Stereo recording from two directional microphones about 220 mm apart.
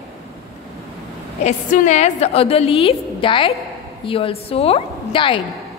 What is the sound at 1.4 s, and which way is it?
A woman's voice, 35° left (ahead or behind).